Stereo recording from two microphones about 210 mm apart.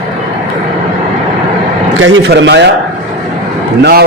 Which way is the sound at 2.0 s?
65° right (ahead or behind).